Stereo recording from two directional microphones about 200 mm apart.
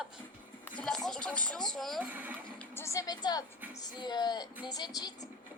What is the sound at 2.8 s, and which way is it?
A woman's voice, 15° left (ahead or behind).